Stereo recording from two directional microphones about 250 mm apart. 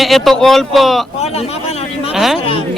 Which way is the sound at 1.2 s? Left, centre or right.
Left.